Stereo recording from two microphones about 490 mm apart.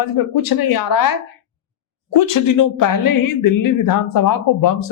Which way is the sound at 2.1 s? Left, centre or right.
Left.